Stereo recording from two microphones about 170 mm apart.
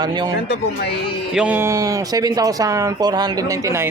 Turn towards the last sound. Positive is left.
turn(degrees=-15)  # may be behind; listen again after turning